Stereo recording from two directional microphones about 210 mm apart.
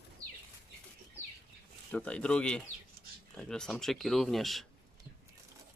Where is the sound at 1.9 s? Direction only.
5° left (ahead or behind).